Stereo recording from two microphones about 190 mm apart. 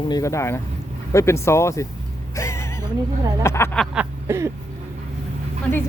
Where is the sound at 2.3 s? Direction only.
15° left (ahead or behind).